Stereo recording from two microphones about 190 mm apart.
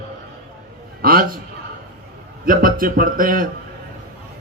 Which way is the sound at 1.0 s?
50° right (ahead or behind).